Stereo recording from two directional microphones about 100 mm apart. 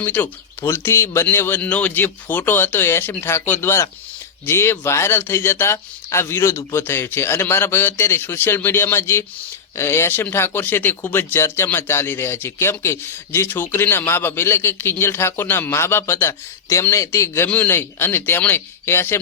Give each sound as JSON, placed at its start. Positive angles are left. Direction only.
{"t": 0.0, "sound": "speech", "side_deg": 20}